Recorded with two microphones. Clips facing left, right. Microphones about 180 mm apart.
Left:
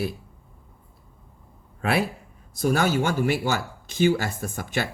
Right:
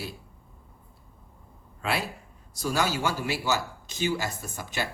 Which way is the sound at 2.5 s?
55° left (ahead or behind).